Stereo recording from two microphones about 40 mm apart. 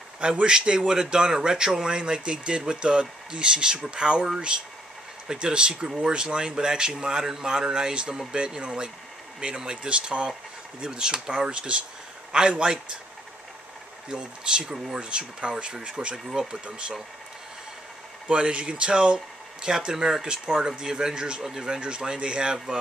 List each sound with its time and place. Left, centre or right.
0.2 s speech: right
14.0 s speech: right
18.3 s speech: right